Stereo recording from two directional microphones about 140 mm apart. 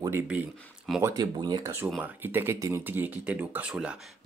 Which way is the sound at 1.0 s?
30° right (ahead or behind).